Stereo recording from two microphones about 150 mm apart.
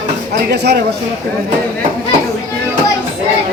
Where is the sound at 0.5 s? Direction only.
90° right.